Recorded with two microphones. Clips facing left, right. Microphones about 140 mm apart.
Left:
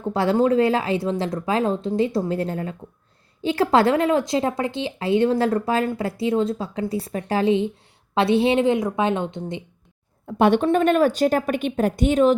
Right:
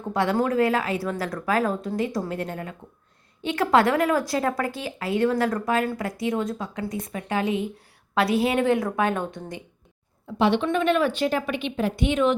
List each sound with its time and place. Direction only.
0.1 s speech: 30° left (ahead or behind)
10.2 s a woman's voice: 50° left (ahead or behind)